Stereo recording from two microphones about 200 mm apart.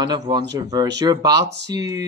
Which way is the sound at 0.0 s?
20° right (ahead or behind).